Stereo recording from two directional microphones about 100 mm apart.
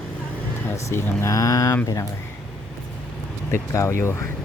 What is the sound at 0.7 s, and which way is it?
Speech, 30° left (ahead or behind).